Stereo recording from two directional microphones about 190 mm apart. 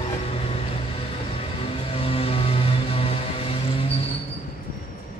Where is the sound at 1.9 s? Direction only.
30° left (ahead or behind).